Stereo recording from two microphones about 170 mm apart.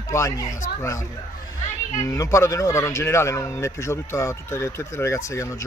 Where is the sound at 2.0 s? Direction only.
20° left (ahead or behind).